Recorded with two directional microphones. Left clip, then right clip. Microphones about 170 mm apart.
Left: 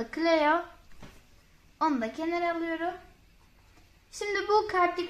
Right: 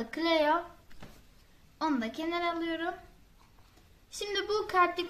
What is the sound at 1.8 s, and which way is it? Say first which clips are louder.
Speech: left 4 dB; 30° left (ahead or behind).